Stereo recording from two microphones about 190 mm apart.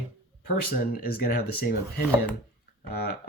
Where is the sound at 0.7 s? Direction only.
50° left (ahead or behind).